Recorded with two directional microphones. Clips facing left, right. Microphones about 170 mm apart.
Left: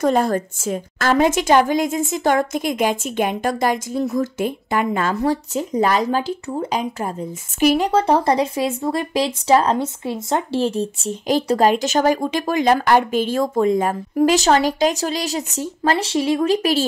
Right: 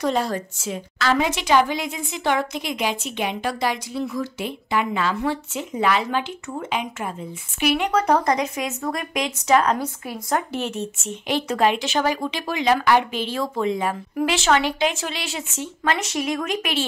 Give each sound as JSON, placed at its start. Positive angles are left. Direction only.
{"t": 0.0, "sound": "a woman's voice", "side_deg": 50}